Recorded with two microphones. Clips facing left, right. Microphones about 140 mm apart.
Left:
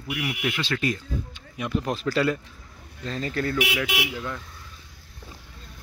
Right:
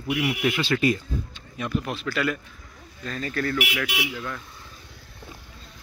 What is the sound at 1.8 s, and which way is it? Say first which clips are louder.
Speech: left 4 dB; 40° left (ahead or behind).